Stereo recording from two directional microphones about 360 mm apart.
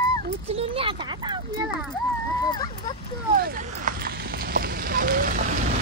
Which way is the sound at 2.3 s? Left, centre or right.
Centre.